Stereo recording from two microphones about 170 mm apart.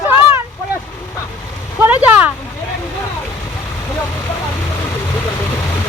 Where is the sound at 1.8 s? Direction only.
10° right (ahead or behind).